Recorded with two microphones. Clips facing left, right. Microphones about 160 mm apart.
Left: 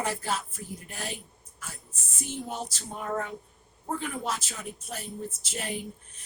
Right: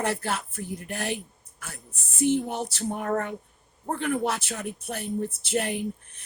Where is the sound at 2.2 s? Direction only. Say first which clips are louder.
Right 10 dB; 60° right (ahead or behind).